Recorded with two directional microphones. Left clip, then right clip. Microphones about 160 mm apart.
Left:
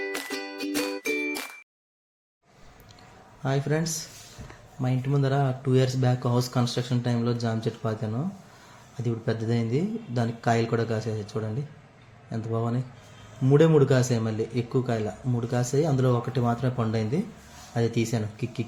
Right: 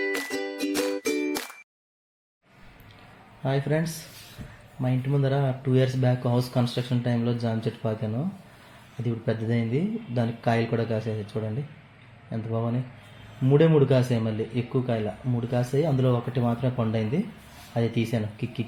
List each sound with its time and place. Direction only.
0.0 s music: centre (ahead or behind)
3.4 s a man's voice: 10° left (ahead or behind)